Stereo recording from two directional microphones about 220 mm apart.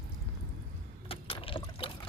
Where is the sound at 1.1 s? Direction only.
25° left (ahead or behind).